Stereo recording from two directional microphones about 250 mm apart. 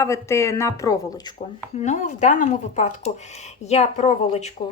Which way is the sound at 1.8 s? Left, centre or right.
Left.